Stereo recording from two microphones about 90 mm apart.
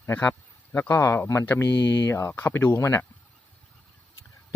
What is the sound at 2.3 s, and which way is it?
Speech, 25° left (ahead or behind).